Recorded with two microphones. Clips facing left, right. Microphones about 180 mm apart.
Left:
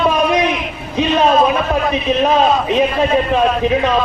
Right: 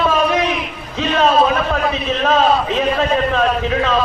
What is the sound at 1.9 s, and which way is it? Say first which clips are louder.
Speech: left 3 dB; 15° left (ahead or behind).